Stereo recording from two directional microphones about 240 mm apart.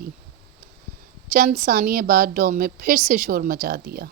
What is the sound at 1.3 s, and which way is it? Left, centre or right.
A woman's voice, right.